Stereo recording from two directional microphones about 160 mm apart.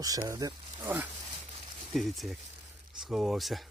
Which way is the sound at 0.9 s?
10° right (ahead or behind).